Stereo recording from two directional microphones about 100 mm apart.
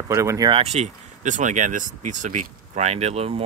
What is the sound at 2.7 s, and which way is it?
Speech, 90° right.